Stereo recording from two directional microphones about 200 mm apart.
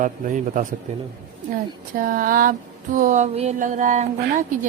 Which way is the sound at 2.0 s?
45° right (ahead or behind).